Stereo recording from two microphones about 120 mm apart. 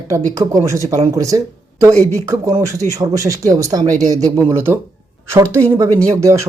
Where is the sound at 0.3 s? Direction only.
25° right (ahead or behind).